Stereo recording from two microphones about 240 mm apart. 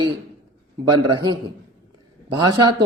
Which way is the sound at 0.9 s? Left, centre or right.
Centre.